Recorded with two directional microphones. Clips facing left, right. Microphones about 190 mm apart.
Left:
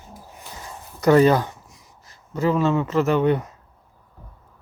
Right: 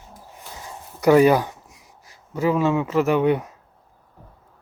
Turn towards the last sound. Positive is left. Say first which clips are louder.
# even
turn(degrees=-10)  # may be behind; listen again after turning